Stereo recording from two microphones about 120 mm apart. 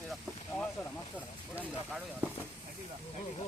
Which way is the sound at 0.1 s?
10° left (ahead or behind).